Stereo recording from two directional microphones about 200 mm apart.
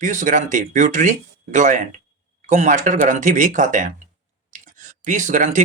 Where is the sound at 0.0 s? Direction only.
40° right (ahead or behind).